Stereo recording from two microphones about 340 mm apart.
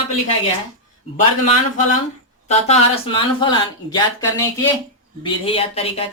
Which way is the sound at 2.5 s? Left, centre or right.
Centre.